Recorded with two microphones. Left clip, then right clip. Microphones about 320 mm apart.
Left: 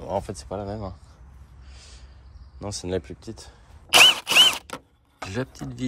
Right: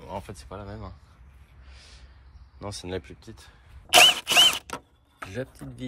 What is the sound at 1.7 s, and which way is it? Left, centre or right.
Snort, centre.